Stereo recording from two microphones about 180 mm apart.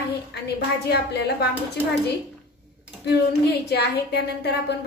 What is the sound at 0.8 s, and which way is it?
Speech, 65° left (ahead or behind).